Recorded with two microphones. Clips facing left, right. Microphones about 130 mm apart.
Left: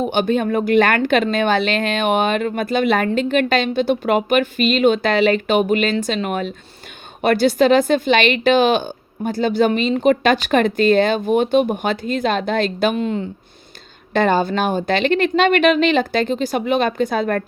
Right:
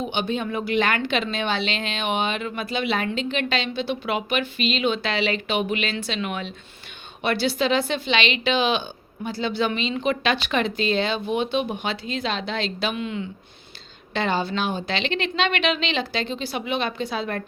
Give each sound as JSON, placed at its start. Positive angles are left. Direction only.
{"t": 0.0, "sound": "a woman's voice", "side_deg": 50}